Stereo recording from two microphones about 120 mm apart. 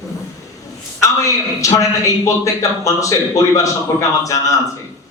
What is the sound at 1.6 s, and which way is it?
A man's voice, 25° left (ahead or behind).